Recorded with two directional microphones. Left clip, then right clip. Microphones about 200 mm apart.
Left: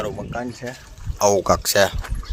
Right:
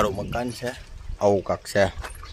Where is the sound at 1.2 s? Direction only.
30° left (ahead or behind).